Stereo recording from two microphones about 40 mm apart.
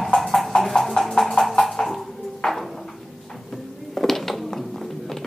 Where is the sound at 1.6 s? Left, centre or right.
Centre.